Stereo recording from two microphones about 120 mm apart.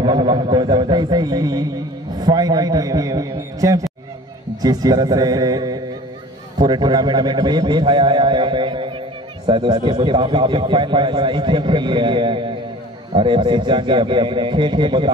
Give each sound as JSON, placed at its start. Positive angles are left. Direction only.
{"t": 0.0, "sound": "a man's voice", "side_deg": -35}